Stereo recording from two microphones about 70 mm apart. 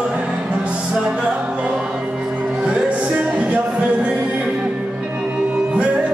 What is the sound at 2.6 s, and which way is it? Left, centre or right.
Music, centre.